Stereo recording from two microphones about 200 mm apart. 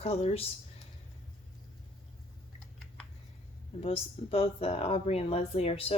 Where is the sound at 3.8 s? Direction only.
30° left (ahead or behind).